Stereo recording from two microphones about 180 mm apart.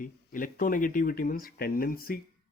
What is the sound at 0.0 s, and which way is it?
Speech, 50° left (ahead or behind).